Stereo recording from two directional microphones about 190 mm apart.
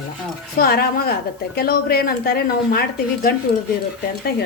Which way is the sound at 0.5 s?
55° left (ahead or behind).